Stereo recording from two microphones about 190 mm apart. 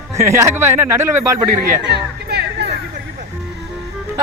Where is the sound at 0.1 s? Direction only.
15° right (ahead or behind).